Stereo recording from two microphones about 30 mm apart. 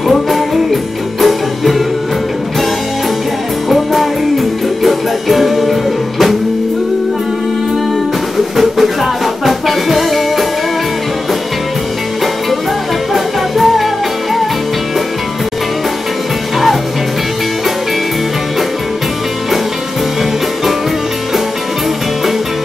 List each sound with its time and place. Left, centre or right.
1.2 s music: centre
3.6 s music: centre
8.5 s music: centre
13.1 s music: centre